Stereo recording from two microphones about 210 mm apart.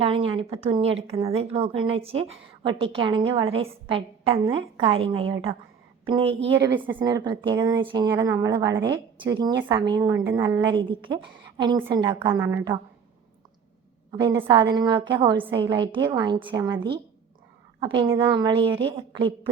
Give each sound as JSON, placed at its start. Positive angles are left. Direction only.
{"t": 0.0, "sound": "speech", "side_deg": -25}
{"t": 12.4, "sound": "a woman's voice", "side_deg": -10}
{"t": 14.1, "sound": "a woman's voice", "side_deg": -20}